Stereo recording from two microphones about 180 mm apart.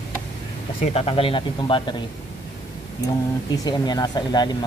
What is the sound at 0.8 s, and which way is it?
Speech, 30° left (ahead or behind).